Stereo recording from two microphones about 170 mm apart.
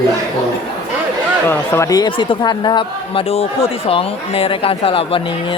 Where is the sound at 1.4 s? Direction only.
15° left (ahead or behind).